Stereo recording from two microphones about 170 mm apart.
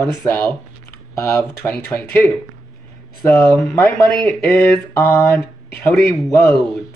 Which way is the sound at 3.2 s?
15° left (ahead or behind).